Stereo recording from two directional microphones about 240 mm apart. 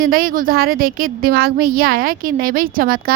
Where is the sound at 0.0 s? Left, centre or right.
Right.